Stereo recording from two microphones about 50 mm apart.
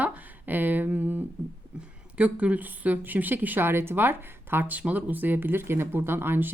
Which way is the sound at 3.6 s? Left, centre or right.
Right.